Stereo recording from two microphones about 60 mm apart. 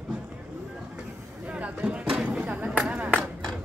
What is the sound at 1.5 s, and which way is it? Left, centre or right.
Speech, right.